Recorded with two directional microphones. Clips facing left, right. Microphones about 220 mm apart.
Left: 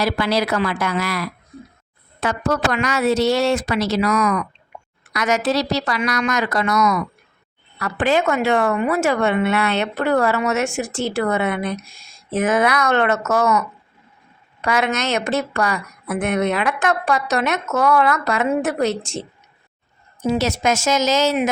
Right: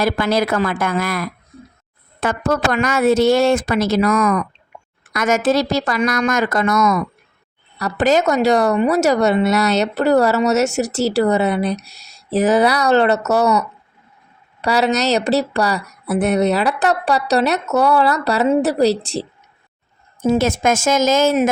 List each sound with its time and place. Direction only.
0.0 s a woman's voice: 50° right (ahead or behind)
20.2 s a woman's voice: 50° right (ahead or behind)